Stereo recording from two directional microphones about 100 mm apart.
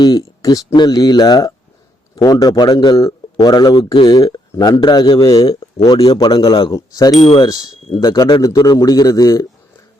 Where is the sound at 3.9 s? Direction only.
50° left (ahead or behind).